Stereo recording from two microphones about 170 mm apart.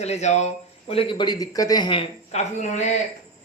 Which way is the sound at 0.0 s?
40° left (ahead or behind).